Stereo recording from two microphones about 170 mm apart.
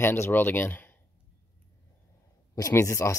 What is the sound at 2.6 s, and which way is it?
Speech, 20° left (ahead or behind).